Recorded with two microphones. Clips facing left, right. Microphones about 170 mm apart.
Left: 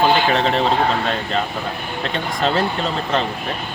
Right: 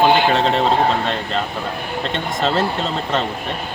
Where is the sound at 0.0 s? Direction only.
15° right (ahead or behind).